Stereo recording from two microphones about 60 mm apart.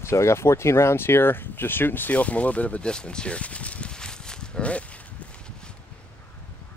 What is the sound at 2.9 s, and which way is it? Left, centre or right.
Speech, centre.